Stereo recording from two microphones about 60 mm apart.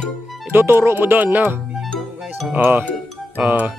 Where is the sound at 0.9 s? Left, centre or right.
Right.